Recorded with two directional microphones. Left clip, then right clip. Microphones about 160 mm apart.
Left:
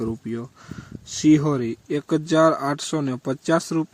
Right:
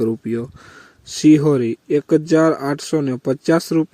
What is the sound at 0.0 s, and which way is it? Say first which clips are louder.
Speech: right 8 dB; 20° right (ahead or behind).